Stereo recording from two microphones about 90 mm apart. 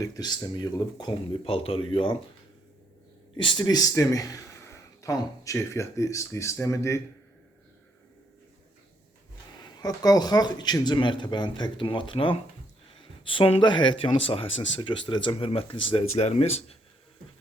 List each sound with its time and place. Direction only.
0.0 s speech: 45° left (ahead or behind)
1.5 s speech: 90° left
3.6 s speech: 45° left (ahead or behind)
9.8 s speech: 45° left (ahead or behind); by 16.0 s 75° left (ahead or behind)
16.2 s speech: 90° left